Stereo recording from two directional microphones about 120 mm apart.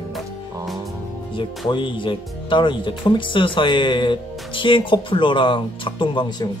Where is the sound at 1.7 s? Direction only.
40° left (ahead or behind).